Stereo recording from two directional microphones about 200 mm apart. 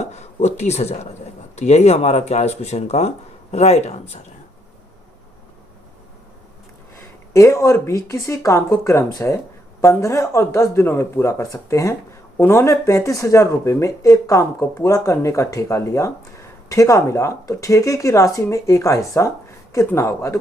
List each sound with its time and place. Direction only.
0.0 s speech: 35° left (ahead or behind)
7.3 s speech: 15° left (ahead or behind)